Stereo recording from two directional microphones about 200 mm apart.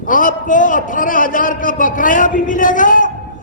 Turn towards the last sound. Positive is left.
turn(degrees=40)  # may be behind; listen again after turning